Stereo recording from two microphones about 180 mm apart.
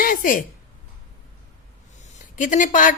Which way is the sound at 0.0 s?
50° left (ahead or behind).